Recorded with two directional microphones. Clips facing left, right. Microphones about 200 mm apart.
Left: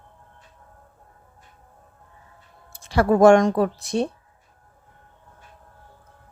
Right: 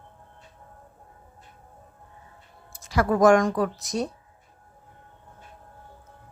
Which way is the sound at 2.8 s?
30° left (ahead or behind).